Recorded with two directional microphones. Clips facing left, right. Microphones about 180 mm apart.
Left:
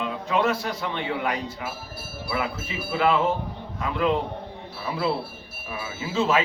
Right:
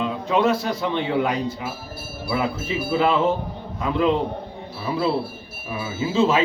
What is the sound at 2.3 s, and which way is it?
Speech, 30° right (ahead or behind).